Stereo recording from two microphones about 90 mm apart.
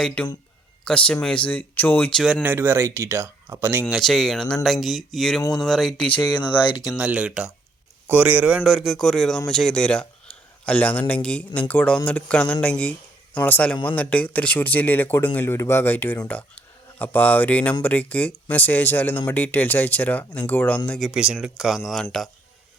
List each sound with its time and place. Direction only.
0.0 s a man's voice: 10° left (ahead or behind)
2.4 s speech: 25° right (ahead or behind)
4.0 s a man's voice: 5° left (ahead or behind)
6.8 s a man's voice: 10° right (ahead or behind); by 21.1 s 15° left (ahead or behind)
21.1 s speech: 10° right (ahead or behind)
22.1 s a man's voice: 5° left (ahead or behind)